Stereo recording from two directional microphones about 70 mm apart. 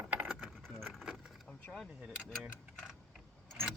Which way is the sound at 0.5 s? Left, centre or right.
Centre.